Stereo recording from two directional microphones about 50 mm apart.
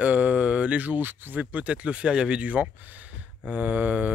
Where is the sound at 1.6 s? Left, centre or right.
Right.